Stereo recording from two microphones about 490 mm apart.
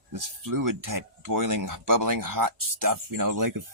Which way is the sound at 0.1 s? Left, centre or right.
Right.